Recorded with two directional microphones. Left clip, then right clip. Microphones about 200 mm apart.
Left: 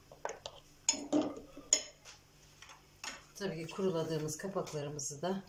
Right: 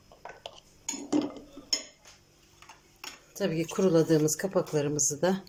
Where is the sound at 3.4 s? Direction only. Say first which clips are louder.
Right 10 dB; 50° right (ahead or behind).